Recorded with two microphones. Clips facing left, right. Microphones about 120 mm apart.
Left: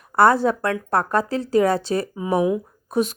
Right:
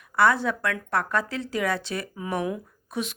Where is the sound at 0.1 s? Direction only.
40° left (ahead or behind).